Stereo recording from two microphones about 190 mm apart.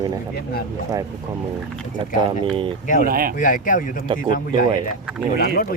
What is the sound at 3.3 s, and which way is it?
Speech, 45° left (ahead or behind).